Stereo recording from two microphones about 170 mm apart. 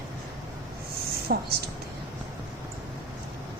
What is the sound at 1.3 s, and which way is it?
Speech, 60° right (ahead or behind).